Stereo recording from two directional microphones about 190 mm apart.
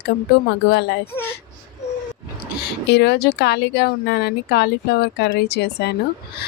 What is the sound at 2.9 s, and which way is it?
Speech, 60° left (ahead or behind).